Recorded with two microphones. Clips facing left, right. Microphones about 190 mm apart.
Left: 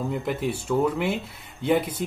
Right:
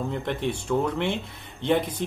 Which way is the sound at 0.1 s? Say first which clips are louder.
Left 1 dB; 5° left (ahead or behind).